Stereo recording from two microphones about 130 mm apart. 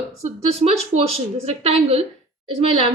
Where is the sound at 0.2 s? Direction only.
55° right (ahead or behind).